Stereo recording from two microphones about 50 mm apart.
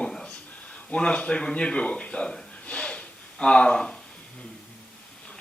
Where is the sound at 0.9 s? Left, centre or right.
Left.